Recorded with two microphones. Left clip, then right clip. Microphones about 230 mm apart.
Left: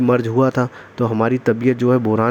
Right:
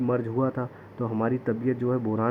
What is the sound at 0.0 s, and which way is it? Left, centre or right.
Speech, left.